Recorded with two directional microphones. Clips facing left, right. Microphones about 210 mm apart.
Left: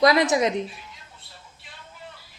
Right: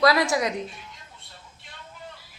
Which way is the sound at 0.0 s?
20° left (ahead or behind).